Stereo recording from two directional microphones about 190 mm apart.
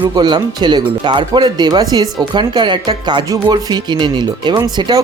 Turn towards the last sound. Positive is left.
turn(degrees=-20)  # may be behind; listen again after turning